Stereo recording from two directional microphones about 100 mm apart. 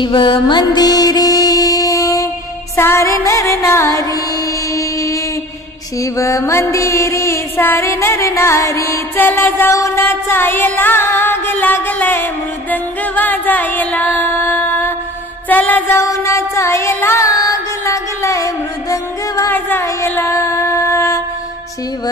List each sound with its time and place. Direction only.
0.0 s music: 55° left (ahead or behind); by 5.2 s 30° left (ahead or behind)
5.9 s mantra: 35° left (ahead or behind)
9.8 s music: 25° left (ahead or behind)
15.4 s a sound: 15° left (ahead or behind)
16.0 s music: 30° left (ahead or behind)
17.3 s mantra: 40° left (ahead or behind)
19.8 s music: 30° left (ahead or behind)